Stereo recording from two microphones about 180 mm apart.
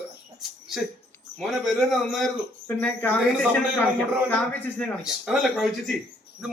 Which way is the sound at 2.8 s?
10° left (ahead or behind).